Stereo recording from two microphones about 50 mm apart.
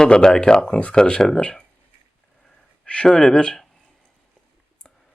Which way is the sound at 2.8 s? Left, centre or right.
Centre.